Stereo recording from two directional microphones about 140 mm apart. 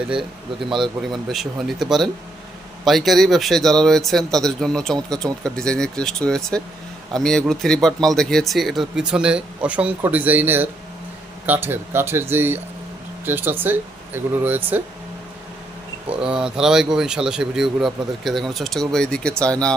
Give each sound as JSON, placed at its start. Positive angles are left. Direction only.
{"t": 0.1, "sound": "speech", "side_deg": 0}
{"t": 16.3, "sound": "speech", "side_deg": -5}